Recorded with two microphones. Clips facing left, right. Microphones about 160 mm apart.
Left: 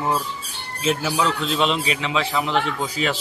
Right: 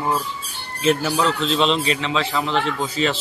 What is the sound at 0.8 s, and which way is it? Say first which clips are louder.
Speech: right 3 dB; 5° left (ahead or behind).